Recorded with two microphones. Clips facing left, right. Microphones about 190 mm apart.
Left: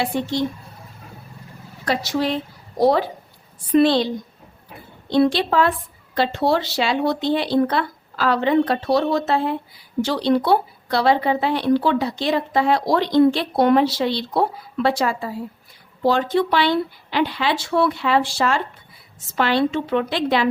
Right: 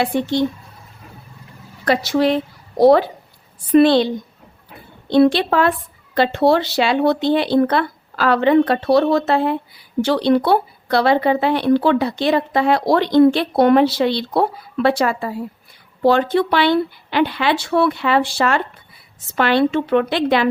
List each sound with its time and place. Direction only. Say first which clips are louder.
0.0 s a woman's voice: right 4 dB; 60° right (ahead or behind)
1.8 s a woman's voice: right 5 dB; 65° right (ahead or behind)
3.8 s a woman's voice: right 4 dB; 60° right (ahead or behind)
5.0 s a woman's voice: right 4 dB; 60° right (ahead or behind)